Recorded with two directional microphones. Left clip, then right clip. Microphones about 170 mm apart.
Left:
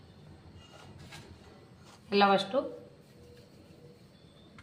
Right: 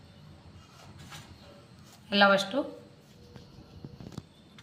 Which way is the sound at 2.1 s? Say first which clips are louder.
Right 2 dB; 50° left (ahead or behind).